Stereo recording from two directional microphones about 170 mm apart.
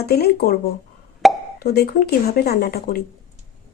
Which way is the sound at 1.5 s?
65° left (ahead or behind).